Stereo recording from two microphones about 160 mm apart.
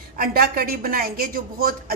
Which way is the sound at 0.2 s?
65° right (ahead or behind).